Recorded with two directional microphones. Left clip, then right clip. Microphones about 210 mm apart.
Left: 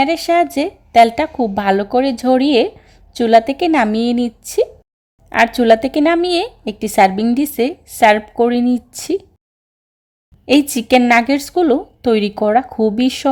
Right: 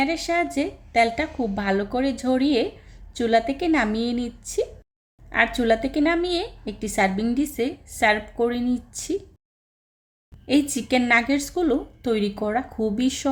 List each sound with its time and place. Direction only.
0.0 s a woman's voice: 35° left (ahead or behind)
10.4 s a woman's voice: 35° left (ahead or behind)